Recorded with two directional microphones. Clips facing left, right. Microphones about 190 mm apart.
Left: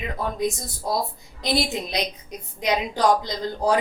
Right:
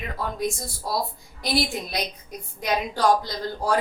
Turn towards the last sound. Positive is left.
turn(degrees=20)  # may be behind; listen again after turning